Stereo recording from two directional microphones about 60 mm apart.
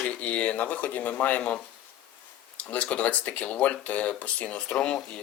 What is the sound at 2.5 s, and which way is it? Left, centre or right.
Speech, left.